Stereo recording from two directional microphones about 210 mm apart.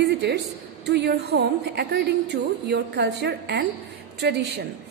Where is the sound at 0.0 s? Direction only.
50° right (ahead or behind).